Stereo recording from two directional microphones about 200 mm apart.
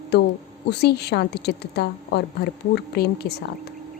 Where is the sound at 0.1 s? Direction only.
55° left (ahead or behind).